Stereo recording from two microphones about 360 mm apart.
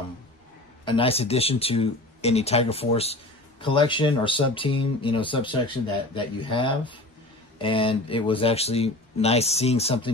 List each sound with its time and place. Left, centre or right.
0.8 s speech: centre